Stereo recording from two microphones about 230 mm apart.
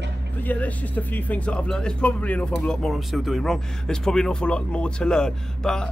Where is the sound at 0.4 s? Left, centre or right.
Centre.